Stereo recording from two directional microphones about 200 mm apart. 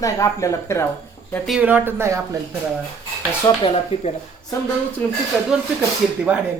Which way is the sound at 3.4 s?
25° left (ahead or behind).